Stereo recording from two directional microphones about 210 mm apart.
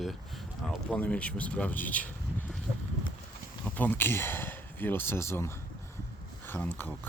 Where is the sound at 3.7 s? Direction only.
10° left (ahead or behind).